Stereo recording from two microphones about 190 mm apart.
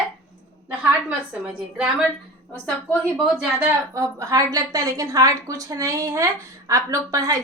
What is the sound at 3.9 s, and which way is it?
A woman's voice, 15° right (ahead or behind).